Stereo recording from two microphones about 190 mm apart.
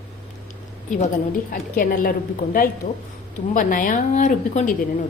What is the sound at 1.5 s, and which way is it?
A woman's voice, 45° left (ahead or behind).